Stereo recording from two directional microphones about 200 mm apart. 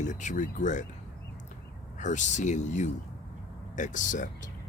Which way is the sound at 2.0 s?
35° left (ahead or behind).